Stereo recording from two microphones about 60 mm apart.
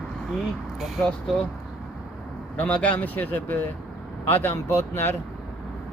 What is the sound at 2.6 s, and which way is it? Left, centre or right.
Speech, left.